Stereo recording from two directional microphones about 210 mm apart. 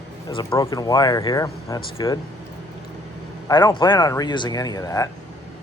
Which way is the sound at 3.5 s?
20° left (ahead or behind).